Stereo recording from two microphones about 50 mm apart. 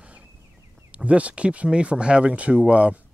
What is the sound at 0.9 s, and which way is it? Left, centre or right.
Speech, right.